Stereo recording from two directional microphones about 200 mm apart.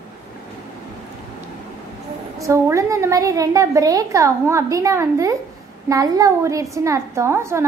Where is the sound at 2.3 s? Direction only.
15° right (ahead or behind).